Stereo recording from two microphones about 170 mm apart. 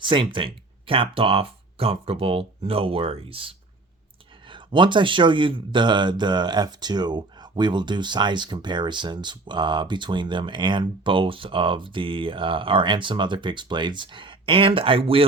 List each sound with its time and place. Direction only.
0.0 s speech: 30° right (ahead or behind)